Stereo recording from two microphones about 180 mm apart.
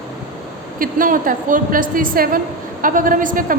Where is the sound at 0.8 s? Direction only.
50° right (ahead or behind).